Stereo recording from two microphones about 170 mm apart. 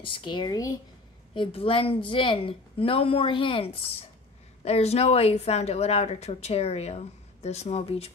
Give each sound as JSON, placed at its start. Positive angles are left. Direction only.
{"t": 0.0, "sound": "speech", "side_deg": 30}